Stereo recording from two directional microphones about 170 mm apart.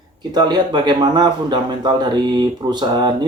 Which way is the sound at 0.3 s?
25° right (ahead or behind).